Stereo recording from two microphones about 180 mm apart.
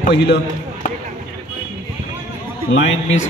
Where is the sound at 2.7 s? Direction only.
90° left.